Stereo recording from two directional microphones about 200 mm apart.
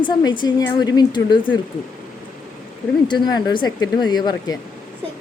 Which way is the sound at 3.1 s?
20° left (ahead or behind).